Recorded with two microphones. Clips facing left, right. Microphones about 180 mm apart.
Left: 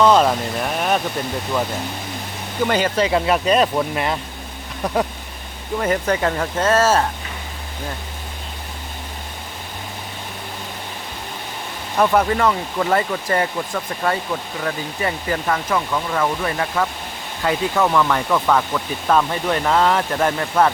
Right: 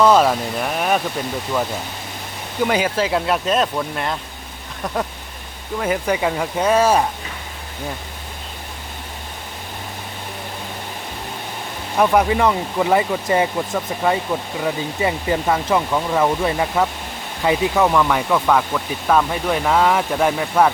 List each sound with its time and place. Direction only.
0.0 s speech: 5° right (ahead or behind)
2.6 s speech: 5° right (ahead or behind)
5.8 s speech: 5° right (ahead or behind)
11.9 s speech: 5° right (ahead or behind)